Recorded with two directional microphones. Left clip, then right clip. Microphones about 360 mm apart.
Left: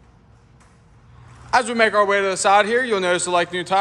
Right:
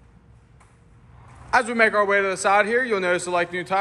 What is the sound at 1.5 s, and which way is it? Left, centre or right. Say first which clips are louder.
A man's voice: left 2 dB; centre.